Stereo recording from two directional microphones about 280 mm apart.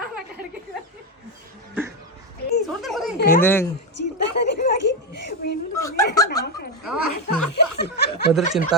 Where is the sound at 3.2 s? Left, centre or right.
Left.